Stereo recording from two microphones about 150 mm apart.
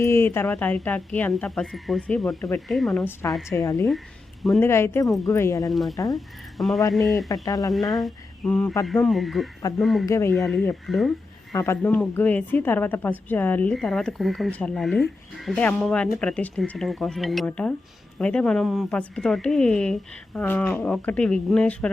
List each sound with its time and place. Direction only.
0.0 s speech: 15° left (ahead or behind); by 3.0 s centre (ahead or behind)
3.0 s speech: 15° left (ahead or behind)
5.7 s speech: centre (ahead or behind)
7.4 s speech: 25° left (ahead or behind)
7.9 s a sound: 5° left (ahead or behind)
8.9 s speech: centre (ahead or behind)
10.1 s speech: 15° left (ahead or behind)
10.5 s speech: 5° left (ahead or behind)
11.5 s speech: 15° left (ahead or behind); by 17.4 s centre (ahead or behind)
17.4 s speech: 10° left (ahead or behind)